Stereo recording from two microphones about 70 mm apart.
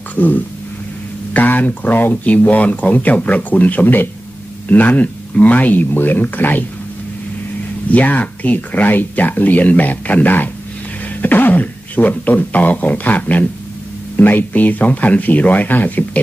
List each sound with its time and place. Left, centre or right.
0.1 s a sound: left
1.3 s speech: left
7.9 s speech: left